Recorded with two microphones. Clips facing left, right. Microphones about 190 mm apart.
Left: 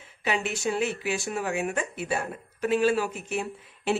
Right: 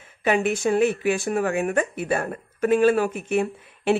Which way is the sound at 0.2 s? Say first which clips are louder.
Right 7 dB; 50° right (ahead or behind).